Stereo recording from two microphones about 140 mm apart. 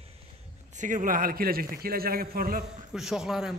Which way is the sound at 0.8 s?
65° right (ahead or behind).